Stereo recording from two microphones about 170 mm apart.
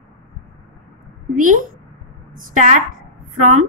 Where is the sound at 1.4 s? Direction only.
50° right (ahead or behind).